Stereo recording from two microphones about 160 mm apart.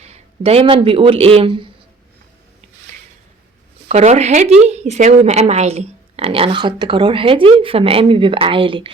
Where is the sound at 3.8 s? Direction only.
45° right (ahead or behind).